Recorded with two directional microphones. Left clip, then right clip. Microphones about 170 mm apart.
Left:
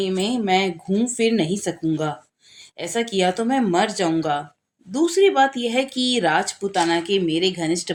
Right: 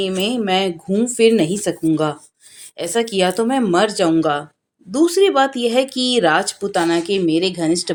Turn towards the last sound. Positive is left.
turn(degrees=-20)  # may be behind; listen again after turning